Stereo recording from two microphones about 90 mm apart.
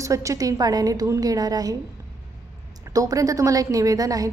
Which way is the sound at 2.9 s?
45° right (ahead or behind).